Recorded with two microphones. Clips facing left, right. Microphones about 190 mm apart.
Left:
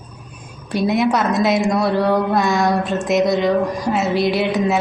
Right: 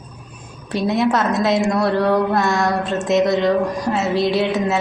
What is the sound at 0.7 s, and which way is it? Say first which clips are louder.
A woman's voice: left 1 dB; centre (ahead or behind).